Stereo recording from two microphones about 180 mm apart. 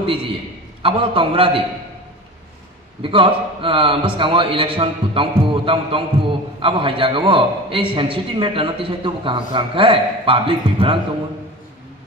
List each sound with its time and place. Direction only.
0.8 s a man's voice: 30° right (ahead or behind)
3.0 s a man's voice: 30° right (ahead or behind)